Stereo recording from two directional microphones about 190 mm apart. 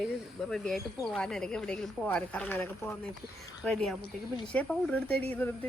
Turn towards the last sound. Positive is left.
turn(degrees=10)  # may be behind; listen again after turning